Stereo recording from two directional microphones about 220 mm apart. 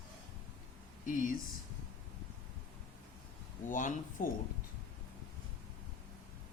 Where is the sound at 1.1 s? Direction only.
40° left (ahead or behind).